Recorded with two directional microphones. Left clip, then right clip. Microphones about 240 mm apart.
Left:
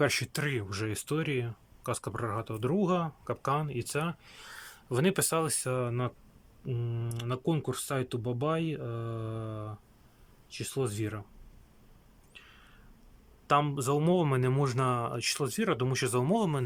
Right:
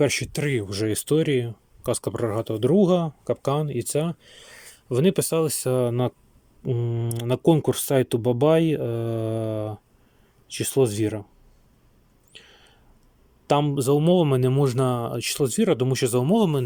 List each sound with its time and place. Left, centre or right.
0.0 s speech: centre
12.3 s a sound: centre
13.5 s speech: centre